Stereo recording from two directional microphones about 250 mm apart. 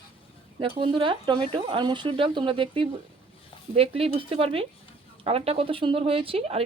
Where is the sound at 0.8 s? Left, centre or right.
Centre.